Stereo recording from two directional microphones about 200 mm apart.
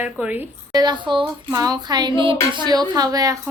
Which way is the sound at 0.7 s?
20° right (ahead or behind).